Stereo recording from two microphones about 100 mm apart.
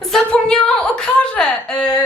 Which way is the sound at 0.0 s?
5° left (ahead or behind).